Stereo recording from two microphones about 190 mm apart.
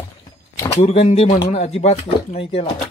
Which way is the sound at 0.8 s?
35° left (ahead or behind).